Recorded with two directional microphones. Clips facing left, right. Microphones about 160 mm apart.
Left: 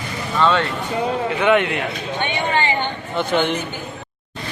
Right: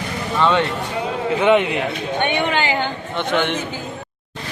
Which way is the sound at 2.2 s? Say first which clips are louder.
Right 1 dB; 90° right.